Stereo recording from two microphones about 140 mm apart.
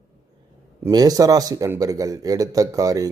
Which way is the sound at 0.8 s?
25° right (ahead or behind).